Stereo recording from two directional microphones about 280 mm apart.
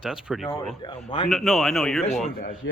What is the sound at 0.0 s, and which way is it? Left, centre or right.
Speech, centre.